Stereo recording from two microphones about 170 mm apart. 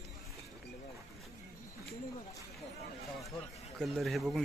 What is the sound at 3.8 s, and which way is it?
Speech, centre (ahead or behind).